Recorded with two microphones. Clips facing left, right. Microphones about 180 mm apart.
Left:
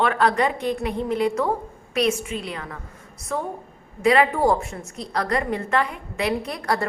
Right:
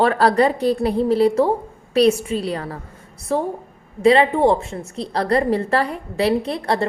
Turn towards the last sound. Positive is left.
turn(degrees=-30)  # may be behind; listen again after turning